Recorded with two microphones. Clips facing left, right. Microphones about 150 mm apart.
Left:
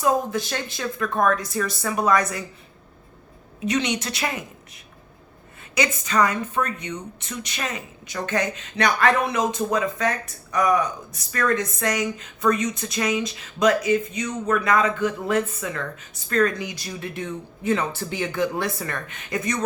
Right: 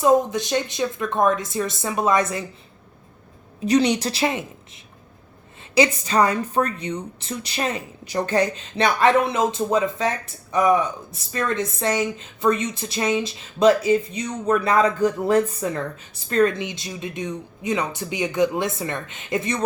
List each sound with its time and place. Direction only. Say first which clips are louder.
0.0 s a woman's voice: right 4 dB; 20° right (ahead or behind)
3.7 s a woman's voice: right 6 dB; 35° right (ahead or behind)
5.7 s a woman's voice: right 4 dB; 30° right (ahead or behind)